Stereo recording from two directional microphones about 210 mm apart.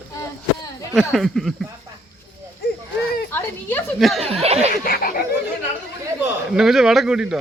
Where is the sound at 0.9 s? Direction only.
Centre (ahead or behind).